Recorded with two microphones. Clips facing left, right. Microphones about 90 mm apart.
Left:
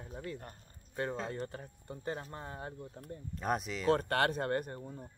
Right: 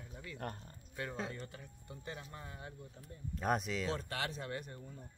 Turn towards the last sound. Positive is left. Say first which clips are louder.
# left 7 dB
turn(degrees=40)  # may be behind; listen again after turning